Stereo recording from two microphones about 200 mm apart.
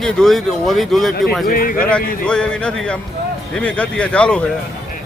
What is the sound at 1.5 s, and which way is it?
Speech, 45° left (ahead or behind).